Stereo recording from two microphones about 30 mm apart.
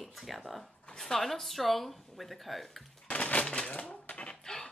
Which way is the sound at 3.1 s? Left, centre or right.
Left.